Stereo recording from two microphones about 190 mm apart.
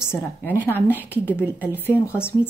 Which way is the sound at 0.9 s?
10° right (ahead or behind).